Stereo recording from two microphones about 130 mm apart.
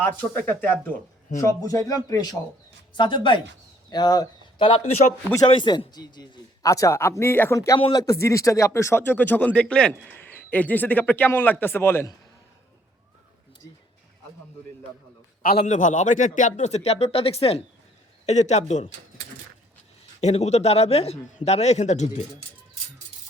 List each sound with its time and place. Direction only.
0.0 s speech: 15° left (ahead or behind)
1.4 s speech: 25° left (ahead or behind)
4.6 s speech: 45° left (ahead or behind); by 12.1 s 20° left (ahead or behind)
15.5 s speech: 65° left (ahead or behind); by 17.6 s 45° left (ahead or behind)
18.3 s speech: 60° left (ahead or behind)
20.2 s speech: 55° left (ahead or behind)